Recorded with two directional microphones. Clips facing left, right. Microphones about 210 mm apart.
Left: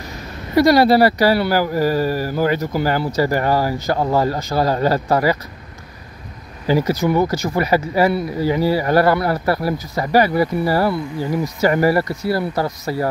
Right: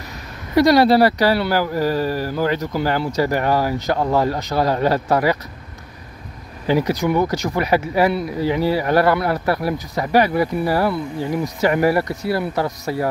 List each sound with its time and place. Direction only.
0.6 s speech: 5° left (ahead or behind)
6.7 s speech: 5° left (ahead or behind)